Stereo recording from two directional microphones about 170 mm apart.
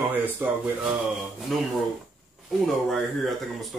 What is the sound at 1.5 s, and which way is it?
Speech, centre (ahead or behind).